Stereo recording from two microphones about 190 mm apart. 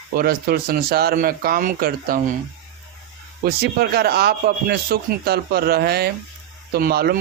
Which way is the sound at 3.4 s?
60° right (ahead or behind).